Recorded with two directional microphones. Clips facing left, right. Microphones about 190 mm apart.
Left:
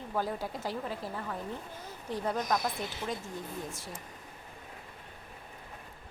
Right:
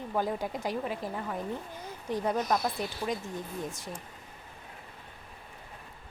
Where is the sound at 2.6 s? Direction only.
15° left (ahead or behind).